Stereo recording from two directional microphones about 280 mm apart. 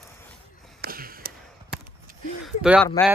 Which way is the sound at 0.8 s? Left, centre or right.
Right.